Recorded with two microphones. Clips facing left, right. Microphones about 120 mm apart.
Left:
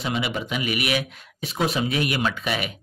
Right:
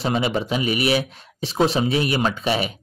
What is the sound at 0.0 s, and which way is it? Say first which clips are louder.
Speech: right 5 dB; 35° right (ahead or behind).